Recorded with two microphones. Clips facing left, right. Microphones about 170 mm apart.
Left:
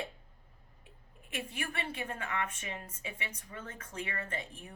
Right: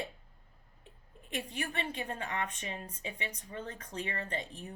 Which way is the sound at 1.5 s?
30° right (ahead or behind).